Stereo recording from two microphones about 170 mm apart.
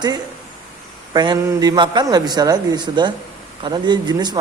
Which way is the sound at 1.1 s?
25° right (ahead or behind).